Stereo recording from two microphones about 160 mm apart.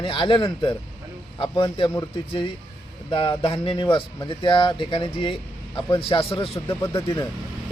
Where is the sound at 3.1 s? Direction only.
35° left (ahead or behind).